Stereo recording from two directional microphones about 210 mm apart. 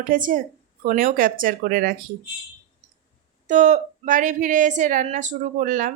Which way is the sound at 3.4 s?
35° right (ahead or behind).